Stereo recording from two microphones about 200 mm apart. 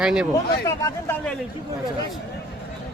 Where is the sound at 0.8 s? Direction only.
15° left (ahead or behind).